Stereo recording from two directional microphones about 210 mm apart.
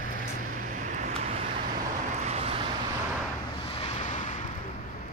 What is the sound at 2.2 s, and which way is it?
Vehicle, 30° right (ahead or behind).